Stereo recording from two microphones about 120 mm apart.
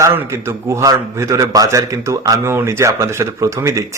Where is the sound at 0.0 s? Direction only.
25° right (ahead or behind).